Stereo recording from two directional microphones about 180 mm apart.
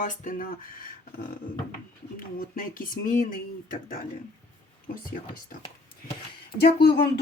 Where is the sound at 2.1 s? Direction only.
50° left (ahead or behind).